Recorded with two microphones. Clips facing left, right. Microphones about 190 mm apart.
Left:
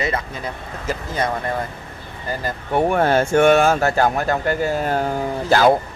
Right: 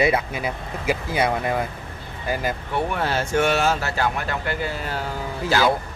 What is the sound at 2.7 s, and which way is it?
Speech, 45° left (ahead or behind).